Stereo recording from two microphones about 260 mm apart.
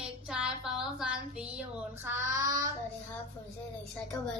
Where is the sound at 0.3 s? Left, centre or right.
Centre.